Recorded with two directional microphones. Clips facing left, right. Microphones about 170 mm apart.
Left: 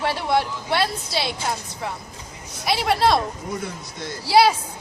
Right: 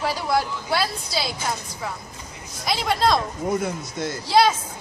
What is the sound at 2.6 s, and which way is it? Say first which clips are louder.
Speech: left 2 dB; 5° left (ahead or behind).